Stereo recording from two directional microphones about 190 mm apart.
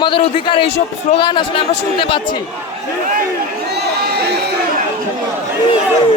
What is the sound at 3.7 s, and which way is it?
Crowd, 60° right (ahead or behind).